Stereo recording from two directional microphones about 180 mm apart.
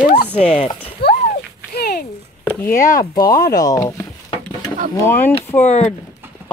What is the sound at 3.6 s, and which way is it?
Speech, 20° left (ahead or behind).